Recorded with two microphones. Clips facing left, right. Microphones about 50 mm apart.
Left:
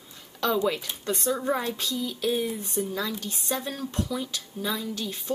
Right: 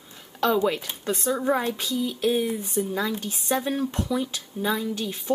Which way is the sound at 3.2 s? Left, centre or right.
Right.